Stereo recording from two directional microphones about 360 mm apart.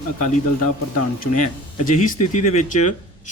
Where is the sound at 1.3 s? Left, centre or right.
Left.